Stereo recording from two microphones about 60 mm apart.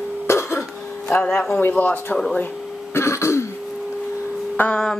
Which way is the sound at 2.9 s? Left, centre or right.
Left.